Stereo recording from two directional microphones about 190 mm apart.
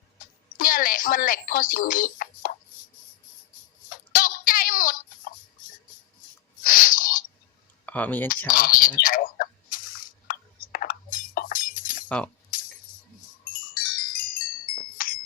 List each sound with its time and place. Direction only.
0.5 s speech: 50° left (ahead or behind)
3.8 s a sound: 45° left (ahead or behind)
6.6 s sneeze: 45° left (ahead or behind)
7.9 s speech: 10° left (ahead or behind)
8.4 s bird: 50° left (ahead or behind)
12.0 s speech: 5° left (ahead or behind)
13.7 s wind chime: 45° left (ahead or behind)
14.9 s chink: 45° left (ahead or behind)